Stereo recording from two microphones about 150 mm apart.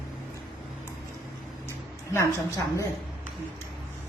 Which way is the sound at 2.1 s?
20° left (ahead or behind).